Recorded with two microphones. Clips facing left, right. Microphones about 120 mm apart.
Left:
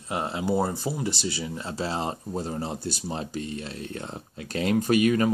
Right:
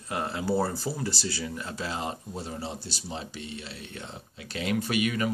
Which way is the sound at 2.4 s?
45° left (ahead or behind).